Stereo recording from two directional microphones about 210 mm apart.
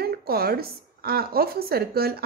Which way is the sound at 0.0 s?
50° right (ahead or behind).